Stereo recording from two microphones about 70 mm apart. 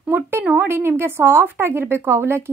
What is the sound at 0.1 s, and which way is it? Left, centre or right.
A woman's voice, right.